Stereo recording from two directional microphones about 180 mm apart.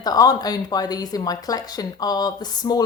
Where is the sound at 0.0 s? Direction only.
20° left (ahead or behind).